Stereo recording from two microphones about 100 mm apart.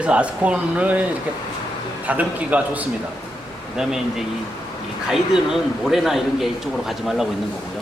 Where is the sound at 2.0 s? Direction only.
15° right (ahead or behind).